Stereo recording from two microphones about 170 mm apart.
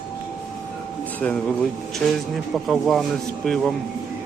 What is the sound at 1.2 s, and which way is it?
Speech, 10° left (ahead or behind).